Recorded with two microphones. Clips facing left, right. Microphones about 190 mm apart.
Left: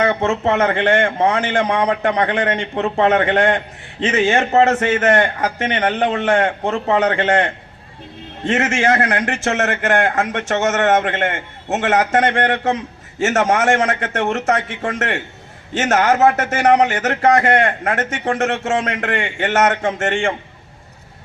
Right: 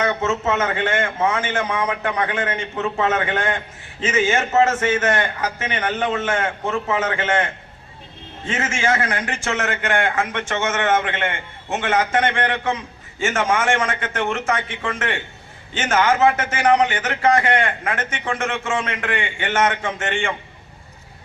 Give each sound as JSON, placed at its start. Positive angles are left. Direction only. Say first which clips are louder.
{"t": 0.0, "sound": "speech", "louder": "left 4 dB", "side_deg": 35}
{"t": 4.9, "sound": "a man's voice", "louder": "left 5 dB", "side_deg": 55}
{"t": 5.6, "sound": "speech", "louder": "left 5 dB", "side_deg": 35}
{"t": 9.3, "sound": "speech", "louder": "left 5 dB", "side_deg": 40}